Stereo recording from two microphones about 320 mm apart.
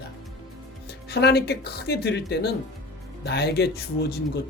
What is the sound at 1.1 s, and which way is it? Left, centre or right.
Speech, left.